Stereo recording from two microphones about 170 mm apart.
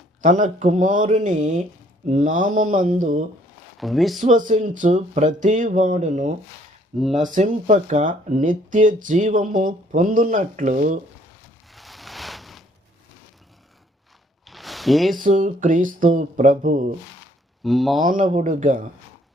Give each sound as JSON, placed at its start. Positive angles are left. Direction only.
{"t": 0.2, "sound": "speech", "side_deg": -50}
{"t": 3.8, "sound": "speech", "side_deg": 0}
{"t": 4.2, "sound": "speech", "side_deg": -50}
{"t": 11.7, "sound": "a sound", "side_deg": 0}
{"t": 14.4, "sound": "a sound", "side_deg": 0}
{"t": 15.2, "sound": "speech", "side_deg": -45}
{"t": 17.6, "sound": "speech", "side_deg": 0}
{"t": 18.0, "sound": "speech", "side_deg": -50}